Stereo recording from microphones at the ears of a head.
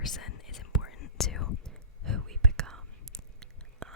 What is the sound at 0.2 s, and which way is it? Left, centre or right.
Whispering, left.